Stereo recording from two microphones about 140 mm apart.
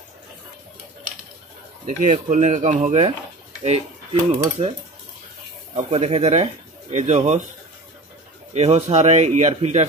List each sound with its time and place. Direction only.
1.9 s speech: 65° right (ahead or behind)
5.9 s speech: 45° right (ahead or behind)
8.5 s speech: 50° right (ahead or behind)